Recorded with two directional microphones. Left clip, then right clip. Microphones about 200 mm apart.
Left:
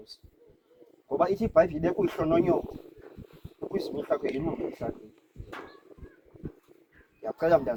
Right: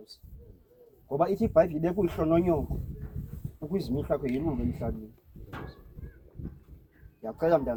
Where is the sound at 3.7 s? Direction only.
Centre (ahead or behind).